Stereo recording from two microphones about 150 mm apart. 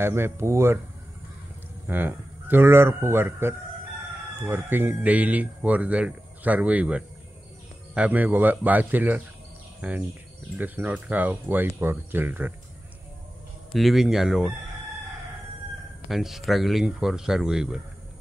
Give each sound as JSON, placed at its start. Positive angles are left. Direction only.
{"t": 0.0, "sound": "speech", "side_deg": -15}
{"t": 1.9, "sound": "speech", "side_deg": -15}
{"t": 13.7, "sound": "speech", "side_deg": 0}
{"t": 16.1, "sound": "speech", "side_deg": 0}